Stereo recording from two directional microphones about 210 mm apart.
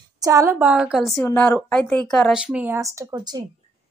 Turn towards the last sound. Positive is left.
turn(degrees=-15)  # may be behind; listen again after turning